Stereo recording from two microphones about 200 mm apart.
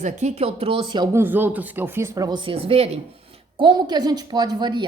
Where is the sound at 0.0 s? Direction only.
35° right (ahead or behind).